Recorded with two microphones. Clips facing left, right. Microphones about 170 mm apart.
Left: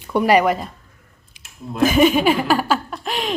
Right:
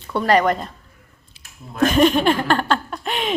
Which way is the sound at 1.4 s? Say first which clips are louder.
Left 1 dB; 15° left (ahead or behind).